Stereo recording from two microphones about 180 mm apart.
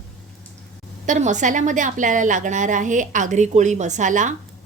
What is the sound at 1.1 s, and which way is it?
A woman's voice, 40° right (ahead or behind).